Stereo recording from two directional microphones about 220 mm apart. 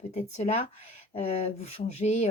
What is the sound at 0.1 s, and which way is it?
Speech, 30° left (ahead or behind).